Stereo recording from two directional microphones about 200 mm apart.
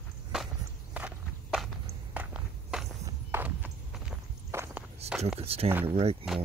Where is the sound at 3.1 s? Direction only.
10° right (ahead or behind).